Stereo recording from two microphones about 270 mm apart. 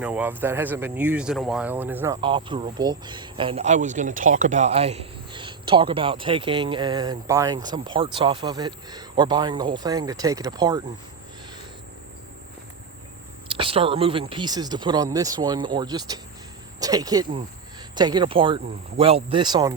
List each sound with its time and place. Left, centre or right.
0.0 s speech: centre
2.2 s speech: centre
13.5 s speech: centre